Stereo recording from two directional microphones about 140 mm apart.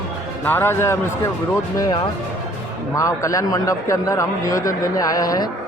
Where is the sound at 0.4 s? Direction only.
15° left (ahead or behind).